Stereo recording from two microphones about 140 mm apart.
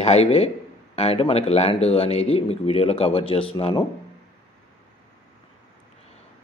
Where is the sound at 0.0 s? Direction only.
50° left (ahead or behind).